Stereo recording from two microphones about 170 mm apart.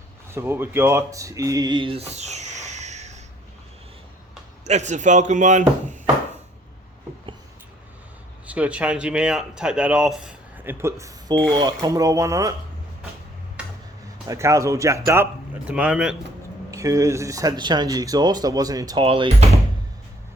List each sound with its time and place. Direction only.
0.3 s speech: 15° right (ahead or behind); by 3.2 s 40° right (ahead or behind)
4.6 s a man's voice: 45° right (ahead or behind)
8.4 s speech: 10° right (ahead or behind)
14.3 s speech: 15° right (ahead or behind)
16.7 s speech: 20° right (ahead or behind)